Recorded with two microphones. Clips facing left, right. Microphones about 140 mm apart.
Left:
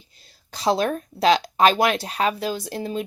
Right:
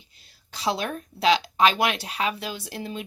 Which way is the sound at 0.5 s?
40° left (ahead or behind).